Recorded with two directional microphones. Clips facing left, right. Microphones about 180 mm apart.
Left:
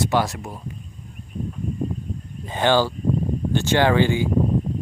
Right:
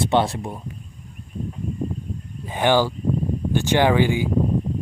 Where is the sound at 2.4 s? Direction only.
15° right (ahead or behind).